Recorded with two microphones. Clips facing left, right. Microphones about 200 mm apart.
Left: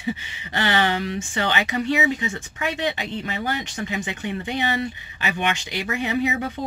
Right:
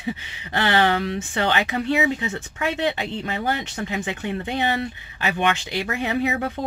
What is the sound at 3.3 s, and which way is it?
Speech, 50° right (ahead or behind).